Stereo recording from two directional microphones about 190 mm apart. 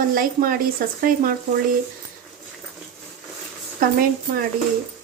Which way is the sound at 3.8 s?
45° right (ahead or behind).